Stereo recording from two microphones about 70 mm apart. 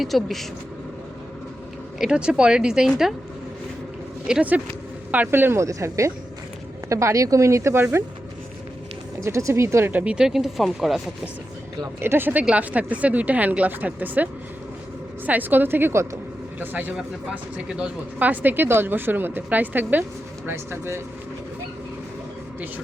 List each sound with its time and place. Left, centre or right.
0.0 s speech: centre
2.0 s speech: centre
4.3 s speech: centre
5.1 s speech: right
5.5 s speech: right
9.2 s speech: right
9.9 s speech: centre
10.2 s speech: centre
11.9 s speech: right
15.3 s a woman's voice: right
16.6 s a woman's voice: right